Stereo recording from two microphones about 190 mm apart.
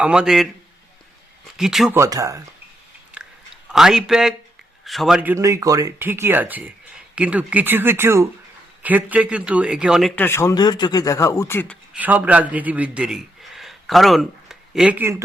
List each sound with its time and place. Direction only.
0.0 s a man's voice: 5° right (ahead or behind)
1.5 s a man's voice: centre (ahead or behind)
2.0 s speech: 20° right (ahead or behind)
3.2 s chewing: 5° right (ahead or behind)
3.7 s a man's voice: centre (ahead or behind)
10.2 s speech: 15° left (ahead or behind)
11.9 s a man's voice: 10° right (ahead or behind)